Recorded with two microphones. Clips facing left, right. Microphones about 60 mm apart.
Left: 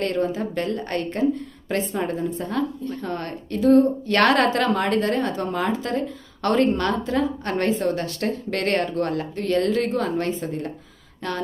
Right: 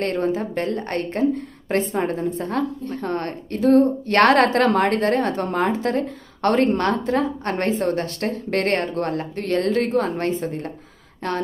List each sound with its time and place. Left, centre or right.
0.0 s a woman's voice: right